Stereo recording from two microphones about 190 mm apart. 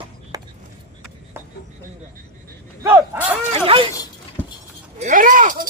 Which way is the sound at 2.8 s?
10° right (ahead or behind).